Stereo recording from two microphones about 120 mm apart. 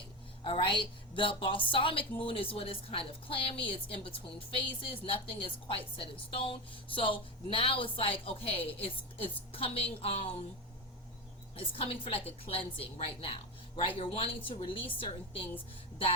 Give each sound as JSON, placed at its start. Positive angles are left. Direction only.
{"t": 0.4, "sound": "a woman's voice", "side_deg": 45}
{"t": 11.5, "sound": "a woman's voice", "side_deg": 50}